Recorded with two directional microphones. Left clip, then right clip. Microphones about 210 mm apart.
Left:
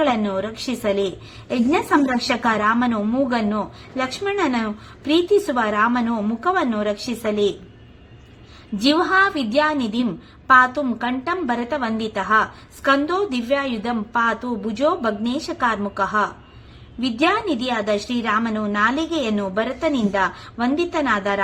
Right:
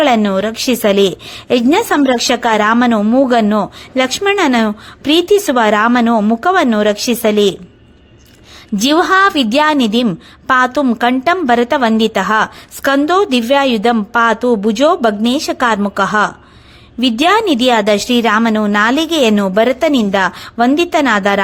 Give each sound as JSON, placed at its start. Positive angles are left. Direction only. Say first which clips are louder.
{"t": 0.0, "sound": "a woman's voice", "louder": "right 8 dB", "side_deg": -35}
{"t": 8.8, "sound": "a woman's voice", "louder": "right 7 dB", "side_deg": -35}